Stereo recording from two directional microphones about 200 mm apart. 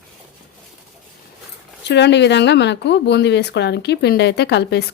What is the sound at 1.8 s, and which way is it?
Speech, 60° left (ahead or behind).